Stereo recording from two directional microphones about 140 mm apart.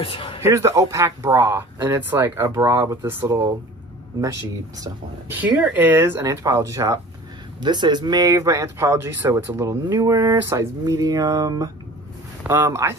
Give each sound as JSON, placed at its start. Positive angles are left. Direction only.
{"t": 0.0, "sound": "a sound", "side_deg": 40}
{"t": 0.4, "sound": "speech", "side_deg": -20}
{"t": 5.3, "sound": "speech", "side_deg": -15}